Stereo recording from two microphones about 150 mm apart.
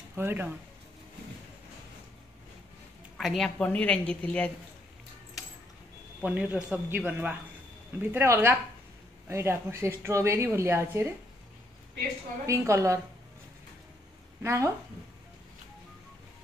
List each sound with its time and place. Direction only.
0.1 s speech: 15° right (ahead or behind)
3.2 s a woman's voice: centre (ahead or behind)
6.2 s a woman's voice: 10° right (ahead or behind)
12.4 s a woman's voice: 20° right (ahead or behind)
14.4 s a woman's voice: 20° right (ahead or behind)